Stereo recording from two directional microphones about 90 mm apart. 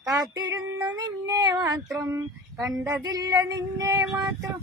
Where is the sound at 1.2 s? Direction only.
50° right (ahead or behind).